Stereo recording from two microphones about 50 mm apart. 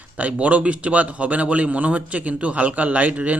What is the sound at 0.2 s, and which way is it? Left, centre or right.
A man's voice, right.